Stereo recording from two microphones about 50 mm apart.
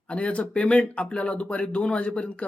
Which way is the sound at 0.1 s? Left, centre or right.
Left.